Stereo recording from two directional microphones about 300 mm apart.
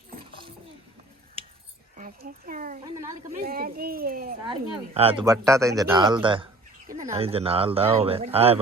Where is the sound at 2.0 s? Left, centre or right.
Right.